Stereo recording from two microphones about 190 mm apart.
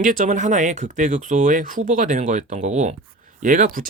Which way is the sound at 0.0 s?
40° right (ahead or behind).